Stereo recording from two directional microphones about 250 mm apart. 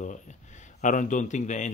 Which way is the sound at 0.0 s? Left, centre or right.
Left.